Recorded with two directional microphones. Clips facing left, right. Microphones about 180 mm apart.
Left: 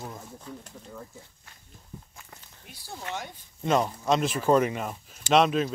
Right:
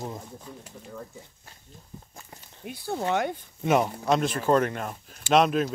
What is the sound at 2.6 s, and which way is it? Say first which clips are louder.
Speech: right 11 dB; 60° right (ahead or behind).